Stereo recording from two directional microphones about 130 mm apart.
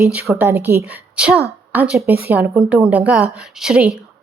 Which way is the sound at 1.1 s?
10° right (ahead or behind).